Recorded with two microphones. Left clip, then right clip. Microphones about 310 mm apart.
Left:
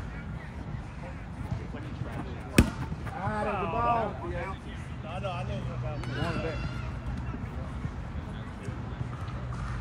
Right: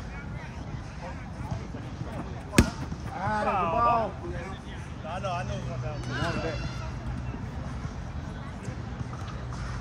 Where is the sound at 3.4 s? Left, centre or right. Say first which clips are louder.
Right 6 dB; centre.